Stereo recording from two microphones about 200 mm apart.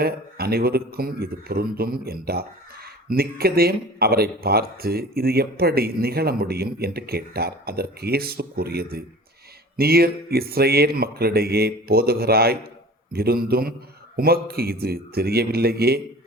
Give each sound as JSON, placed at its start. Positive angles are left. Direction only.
{"t": 0.0, "sound": "a man's voice", "side_deg": -50}